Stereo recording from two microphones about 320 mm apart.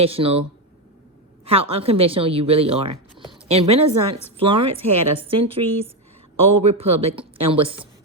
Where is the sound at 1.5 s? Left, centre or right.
Centre.